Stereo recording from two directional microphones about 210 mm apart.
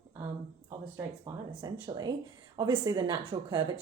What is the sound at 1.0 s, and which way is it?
A woman's voice, 20° right (ahead or behind).